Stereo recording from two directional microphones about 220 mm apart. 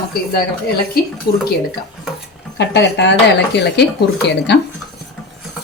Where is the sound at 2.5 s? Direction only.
50° left (ahead or behind).